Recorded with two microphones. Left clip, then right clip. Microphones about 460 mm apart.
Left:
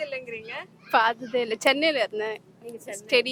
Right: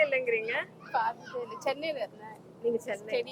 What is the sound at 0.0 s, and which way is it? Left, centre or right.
Speech, left.